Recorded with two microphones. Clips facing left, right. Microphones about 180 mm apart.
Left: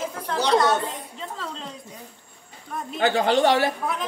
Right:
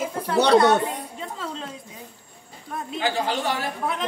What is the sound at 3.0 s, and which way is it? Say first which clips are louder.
Speech: left 6 dB; 65° left (ahead or behind).